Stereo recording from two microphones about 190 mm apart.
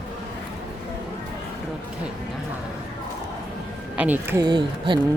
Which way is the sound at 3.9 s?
10° right (ahead or behind).